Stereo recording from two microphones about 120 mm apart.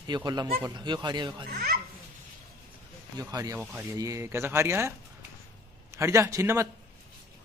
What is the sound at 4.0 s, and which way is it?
Speech, 25° right (ahead or behind).